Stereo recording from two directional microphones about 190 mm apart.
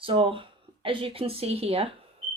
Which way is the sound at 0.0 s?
30° right (ahead or behind).